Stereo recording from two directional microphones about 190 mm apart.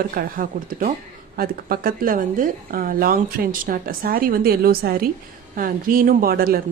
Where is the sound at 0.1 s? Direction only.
50° right (ahead or behind).